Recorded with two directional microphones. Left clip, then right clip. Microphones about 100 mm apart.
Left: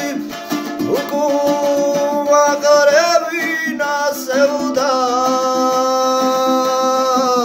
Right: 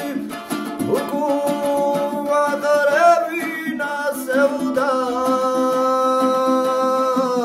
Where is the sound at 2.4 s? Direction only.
40° right (ahead or behind).